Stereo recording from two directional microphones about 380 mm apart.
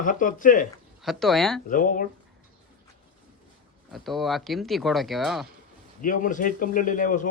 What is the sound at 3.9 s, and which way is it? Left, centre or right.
Speech, centre.